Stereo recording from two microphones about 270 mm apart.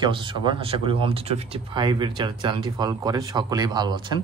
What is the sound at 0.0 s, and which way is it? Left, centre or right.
Speech, centre.